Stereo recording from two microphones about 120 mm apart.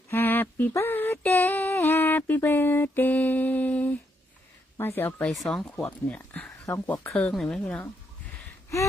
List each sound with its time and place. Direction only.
0.1 s a sound: 15° left (ahead or behind)
0.7 s female singing: 20° left (ahead or behind)
5.3 s speech: centre (ahead or behind)
6.7 s female singing: 20° left (ahead or behind)